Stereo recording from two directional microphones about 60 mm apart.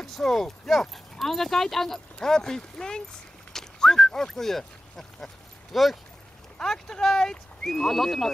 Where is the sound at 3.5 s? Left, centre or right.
Centre.